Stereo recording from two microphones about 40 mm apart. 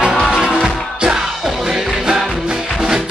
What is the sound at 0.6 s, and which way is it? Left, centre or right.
Music, centre.